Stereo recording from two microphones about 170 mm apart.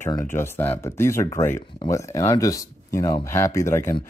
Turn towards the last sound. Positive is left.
turn(degrees=15)  # may be behind; listen again after turning